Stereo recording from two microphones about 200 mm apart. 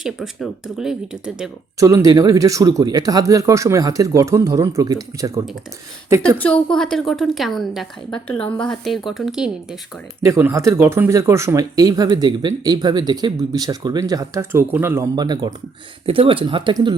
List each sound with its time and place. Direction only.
0.0 s speech: centre (ahead or behind)
1.8 s speech: 15° right (ahead or behind)
6.7 s speech: 5° left (ahead or behind); by 16.9 s 25° right (ahead or behind)